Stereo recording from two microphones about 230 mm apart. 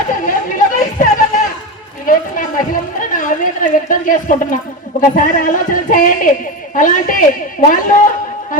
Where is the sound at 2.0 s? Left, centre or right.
Left.